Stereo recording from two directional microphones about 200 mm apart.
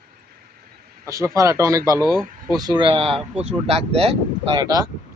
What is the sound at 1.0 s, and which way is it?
Speech, 15° right (ahead or behind).